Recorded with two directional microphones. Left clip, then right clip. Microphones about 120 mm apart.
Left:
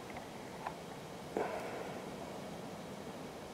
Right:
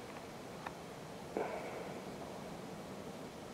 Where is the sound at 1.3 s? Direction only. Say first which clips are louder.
Left 2 dB; 25° left (ahead or behind).